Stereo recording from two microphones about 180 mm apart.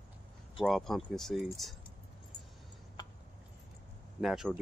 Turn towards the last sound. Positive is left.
turn(degrees=0)  # may be behind; listen again after turning